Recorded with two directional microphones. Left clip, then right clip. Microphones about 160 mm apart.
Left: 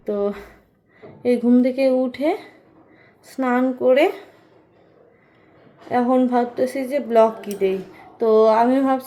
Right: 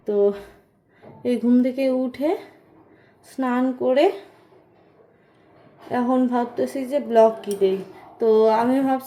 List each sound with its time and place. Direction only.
0.2 s speech: centre (ahead or behind)
3.8 s speech: 25° left (ahead or behind)
5.9 s speech: centre (ahead or behind)